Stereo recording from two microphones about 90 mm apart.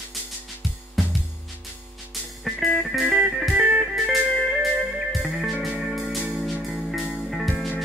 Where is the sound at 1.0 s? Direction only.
Centre (ahead or behind).